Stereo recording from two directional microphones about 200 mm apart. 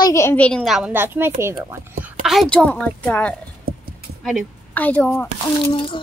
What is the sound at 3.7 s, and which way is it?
Clip-clop, 50° right (ahead or behind).